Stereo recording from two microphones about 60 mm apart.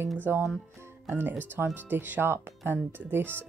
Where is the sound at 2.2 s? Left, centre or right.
Right.